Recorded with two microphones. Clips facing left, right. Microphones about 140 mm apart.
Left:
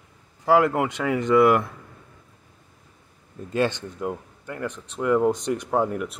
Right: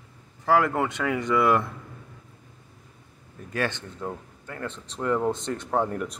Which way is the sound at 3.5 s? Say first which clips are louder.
Left 5 dB; 20° left (ahead or behind).